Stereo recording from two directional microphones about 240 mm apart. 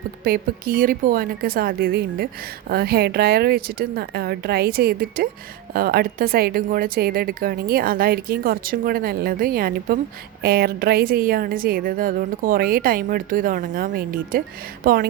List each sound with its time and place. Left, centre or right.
0.3 s a woman's voice: right